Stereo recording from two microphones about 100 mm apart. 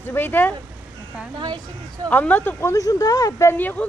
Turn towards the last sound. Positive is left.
turn(degrees=20)  # may be behind; listen again after turning